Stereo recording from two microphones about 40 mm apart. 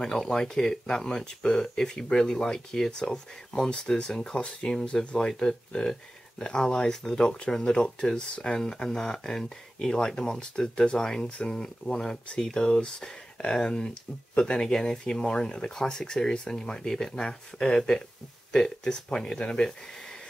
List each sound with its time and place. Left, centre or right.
0.0 s speech: centre